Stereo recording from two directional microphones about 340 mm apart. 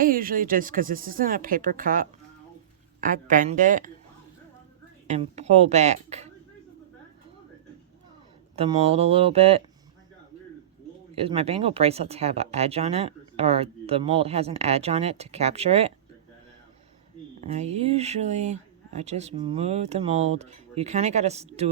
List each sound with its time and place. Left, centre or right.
0.0 s speech: right
5.0 s speech: centre
8.5 s speech: centre
11.1 s speech: centre
17.5 s speech: centre